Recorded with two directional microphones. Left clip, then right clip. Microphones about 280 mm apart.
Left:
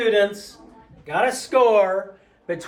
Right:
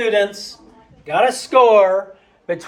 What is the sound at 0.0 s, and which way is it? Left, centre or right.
Speech, right.